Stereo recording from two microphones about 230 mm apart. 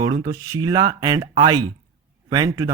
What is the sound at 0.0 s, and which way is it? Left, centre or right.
Speech, centre.